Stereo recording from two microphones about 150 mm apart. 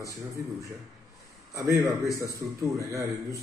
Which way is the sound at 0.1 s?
20° right (ahead or behind).